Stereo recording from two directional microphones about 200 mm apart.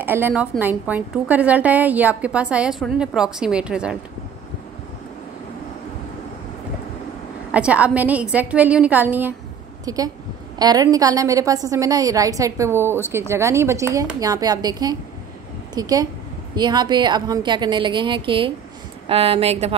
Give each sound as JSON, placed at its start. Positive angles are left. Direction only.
{"t": 0.0, "sound": "a woman's voice", "side_deg": -10}
{"t": 7.5, "sound": "a woman's voice", "side_deg": -5}